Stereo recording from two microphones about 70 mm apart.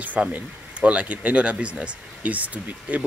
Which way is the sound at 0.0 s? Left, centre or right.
Right.